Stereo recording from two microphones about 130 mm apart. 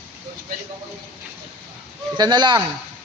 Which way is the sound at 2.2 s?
35° right (ahead or behind).